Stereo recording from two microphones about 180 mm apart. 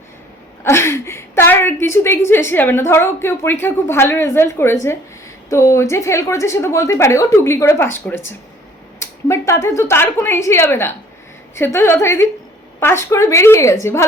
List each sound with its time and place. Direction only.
0.6 s a woman's voice: 15° left (ahead or behind)